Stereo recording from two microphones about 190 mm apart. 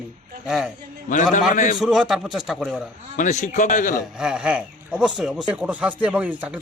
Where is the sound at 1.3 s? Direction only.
40° left (ahead or behind).